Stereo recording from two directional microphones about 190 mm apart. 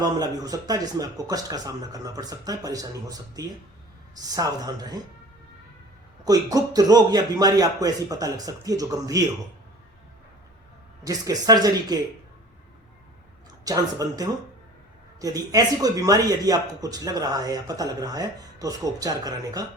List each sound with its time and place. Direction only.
0.0 s speech: 20° right (ahead or behind)
6.2 s speech: 20° right (ahead or behind)
11.0 s speech: 20° right (ahead or behind)
13.7 s speech: 20° right (ahead or behind)